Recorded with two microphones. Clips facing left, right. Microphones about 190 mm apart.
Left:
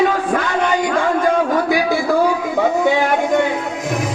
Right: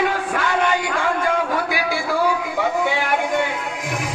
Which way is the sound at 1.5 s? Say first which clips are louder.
Left 6 dB; 45° left (ahead or behind).